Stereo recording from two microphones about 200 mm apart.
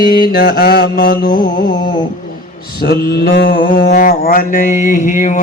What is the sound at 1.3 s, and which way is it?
Mantra, 40° left (ahead or behind).